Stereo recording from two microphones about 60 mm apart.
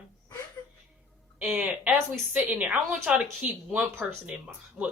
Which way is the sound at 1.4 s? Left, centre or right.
Centre.